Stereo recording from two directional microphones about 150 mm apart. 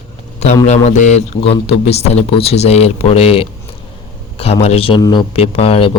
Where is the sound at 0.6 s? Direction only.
50° left (ahead or behind); by 5.2 s 30° left (ahead or behind).